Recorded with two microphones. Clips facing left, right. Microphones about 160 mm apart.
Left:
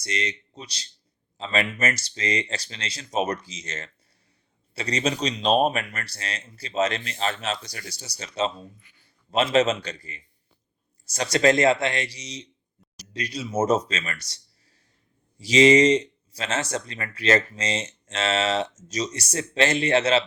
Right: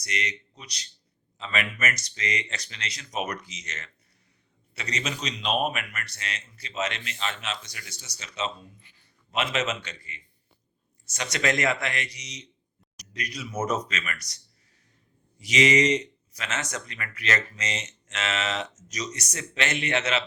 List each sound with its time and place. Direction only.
0.0 s speech: 30° left (ahead or behind)